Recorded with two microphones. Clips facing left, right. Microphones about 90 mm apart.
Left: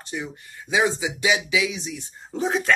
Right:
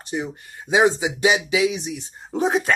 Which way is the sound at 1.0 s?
40° right (ahead or behind).